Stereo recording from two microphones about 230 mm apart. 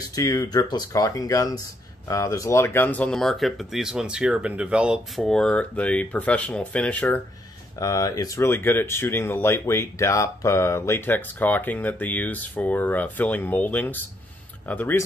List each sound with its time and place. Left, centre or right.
0.1 s speech: centre